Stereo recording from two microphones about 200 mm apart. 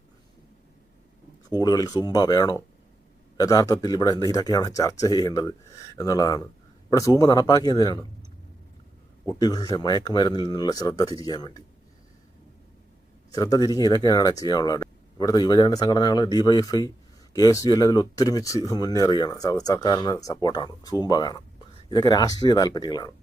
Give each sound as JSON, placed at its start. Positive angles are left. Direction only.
{"t": 1.5, "sound": "speech", "side_deg": 20}
{"t": 9.2, "sound": "speech", "side_deg": 20}
{"t": 13.3, "sound": "speech", "side_deg": 20}